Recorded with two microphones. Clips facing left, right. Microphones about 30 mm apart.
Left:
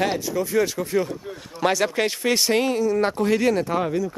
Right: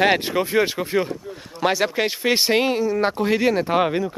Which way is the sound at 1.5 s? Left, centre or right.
Centre.